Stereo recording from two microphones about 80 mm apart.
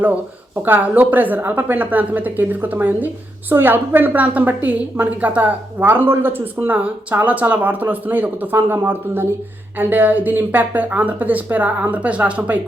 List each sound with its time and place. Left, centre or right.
0.0 s a woman's voice: right